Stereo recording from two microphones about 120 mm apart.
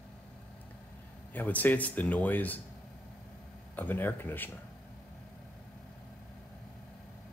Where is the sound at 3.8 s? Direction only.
15° left (ahead or behind).